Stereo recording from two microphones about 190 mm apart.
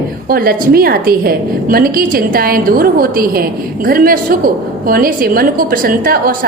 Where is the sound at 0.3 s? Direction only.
50° right (ahead or behind).